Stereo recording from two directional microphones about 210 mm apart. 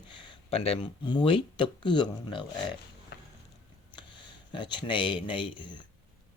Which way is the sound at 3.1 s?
50° left (ahead or behind).